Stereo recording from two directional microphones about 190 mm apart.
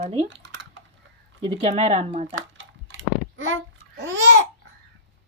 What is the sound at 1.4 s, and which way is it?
Speech, 35° right (ahead or behind).